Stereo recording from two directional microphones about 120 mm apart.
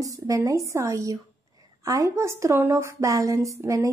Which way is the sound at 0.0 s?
30° right (ahead or behind).